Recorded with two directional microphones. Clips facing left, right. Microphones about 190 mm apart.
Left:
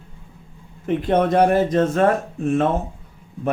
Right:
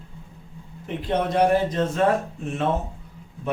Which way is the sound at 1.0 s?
50° left (ahead or behind).